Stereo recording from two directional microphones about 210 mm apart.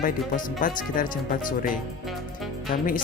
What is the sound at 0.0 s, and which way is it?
Speech, 40° left (ahead or behind).